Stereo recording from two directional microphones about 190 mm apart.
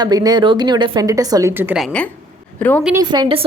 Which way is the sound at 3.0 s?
20° right (ahead or behind).